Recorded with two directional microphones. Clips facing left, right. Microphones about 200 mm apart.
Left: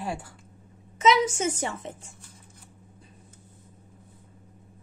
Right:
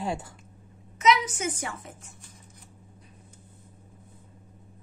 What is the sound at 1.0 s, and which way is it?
Speech, 25° left (ahead or behind).